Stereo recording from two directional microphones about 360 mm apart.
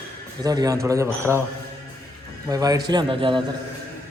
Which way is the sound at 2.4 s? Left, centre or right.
Centre.